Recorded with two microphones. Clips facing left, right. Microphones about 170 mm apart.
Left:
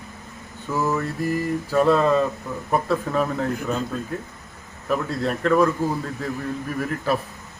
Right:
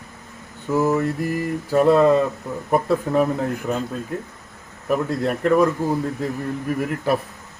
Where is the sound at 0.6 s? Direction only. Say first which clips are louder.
Right 4 dB; 20° right (ahead or behind).